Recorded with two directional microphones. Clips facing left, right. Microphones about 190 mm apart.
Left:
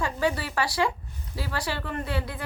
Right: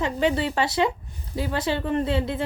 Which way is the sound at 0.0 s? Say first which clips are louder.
Right 4 dB; 20° right (ahead or behind).